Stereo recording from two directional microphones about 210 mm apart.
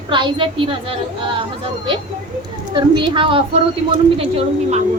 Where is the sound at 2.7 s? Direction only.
25° right (ahead or behind).